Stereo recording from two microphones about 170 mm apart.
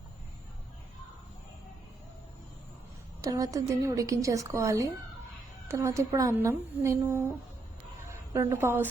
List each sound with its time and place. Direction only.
3.2 s a woman's voice: 20° right (ahead or behind)
8.3 s a woman's voice: 15° right (ahead or behind)